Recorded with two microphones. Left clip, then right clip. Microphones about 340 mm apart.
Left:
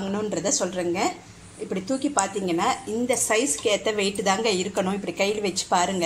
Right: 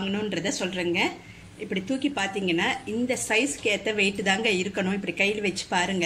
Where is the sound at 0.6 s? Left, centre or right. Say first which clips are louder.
Left 1 dB; left.